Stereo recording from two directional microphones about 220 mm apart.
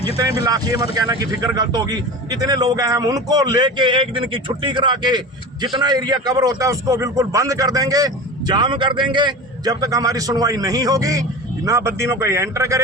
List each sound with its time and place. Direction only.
0.4 s a man's voice: 15° right (ahead or behind)